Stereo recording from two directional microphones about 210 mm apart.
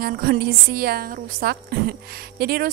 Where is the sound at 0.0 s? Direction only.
45° right (ahead or behind).